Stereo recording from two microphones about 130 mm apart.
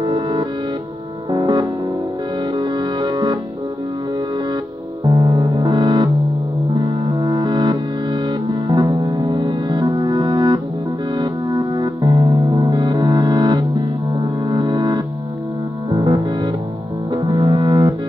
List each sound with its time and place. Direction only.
0.0 s music: 40° right (ahead or behind)
5.0 s music: 35° right (ahead or behind)